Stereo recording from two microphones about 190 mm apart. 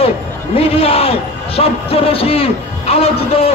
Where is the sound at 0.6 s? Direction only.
30° left (ahead or behind).